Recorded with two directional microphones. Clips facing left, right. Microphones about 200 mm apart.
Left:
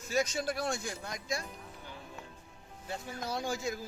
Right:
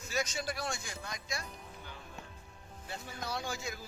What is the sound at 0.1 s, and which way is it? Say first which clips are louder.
A man's voice: left 5 dB; 50° left (ahead or behind).